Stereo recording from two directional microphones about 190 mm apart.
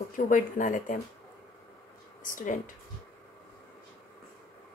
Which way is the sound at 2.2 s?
45° left (ahead or behind).